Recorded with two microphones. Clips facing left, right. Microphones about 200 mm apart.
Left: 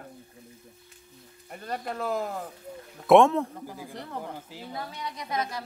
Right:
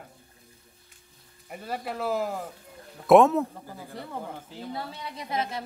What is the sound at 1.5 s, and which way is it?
Speech, 5° right (ahead or behind).